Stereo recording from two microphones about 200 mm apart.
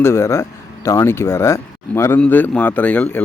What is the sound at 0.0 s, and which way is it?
Speech, 15° left (ahead or behind).